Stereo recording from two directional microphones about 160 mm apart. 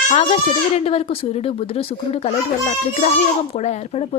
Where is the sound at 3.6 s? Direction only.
45° left (ahead or behind).